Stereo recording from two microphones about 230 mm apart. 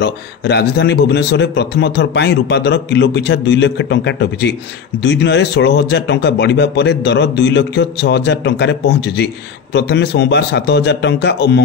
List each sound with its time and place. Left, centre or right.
0.0 s speech: left